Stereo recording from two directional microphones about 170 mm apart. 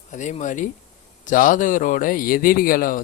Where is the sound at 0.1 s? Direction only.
45° left (ahead or behind).